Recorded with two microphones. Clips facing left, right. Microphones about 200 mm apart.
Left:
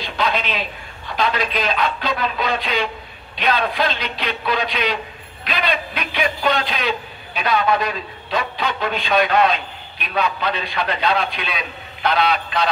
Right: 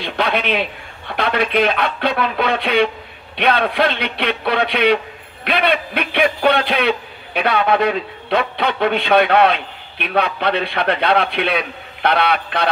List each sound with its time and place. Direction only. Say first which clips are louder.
0.0 s a man's voice: right 3 dB; 60° right (ahead or behind)